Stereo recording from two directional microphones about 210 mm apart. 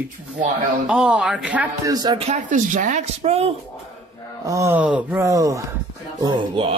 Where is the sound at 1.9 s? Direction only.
25° right (ahead or behind).